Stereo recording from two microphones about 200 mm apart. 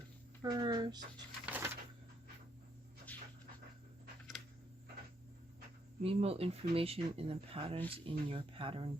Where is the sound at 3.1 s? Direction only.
10° left (ahead or behind).